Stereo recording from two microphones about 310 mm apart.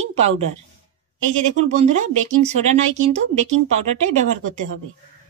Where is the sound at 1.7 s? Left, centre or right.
Right.